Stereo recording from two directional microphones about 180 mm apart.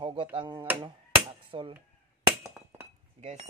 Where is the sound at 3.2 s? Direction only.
40° right (ahead or behind).